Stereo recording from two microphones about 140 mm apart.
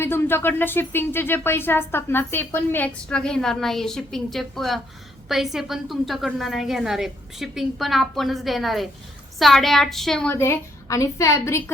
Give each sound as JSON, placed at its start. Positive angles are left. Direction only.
{"t": 0.0, "sound": "a woman's voice", "side_deg": 15}
{"t": 10.3, "sound": "a woman's voice", "side_deg": 20}